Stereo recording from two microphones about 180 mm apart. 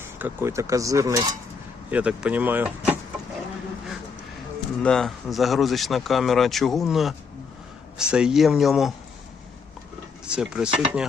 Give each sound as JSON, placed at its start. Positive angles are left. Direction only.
{"t": 0.0, "sound": "speech", "side_deg": -10}
{"t": 1.9, "sound": "speech", "side_deg": -5}
{"t": 4.8, "sound": "speech", "side_deg": 5}
{"t": 10.2, "sound": "speech", "side_deg": -5}